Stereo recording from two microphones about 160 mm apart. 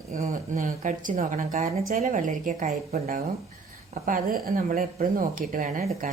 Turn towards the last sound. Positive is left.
turn(degrees=-55)  # may be behind; listen again after turning